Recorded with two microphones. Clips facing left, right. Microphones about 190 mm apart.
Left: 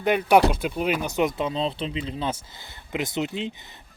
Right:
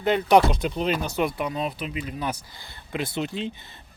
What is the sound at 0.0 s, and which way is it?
Speech, 15° left (ahead or behind).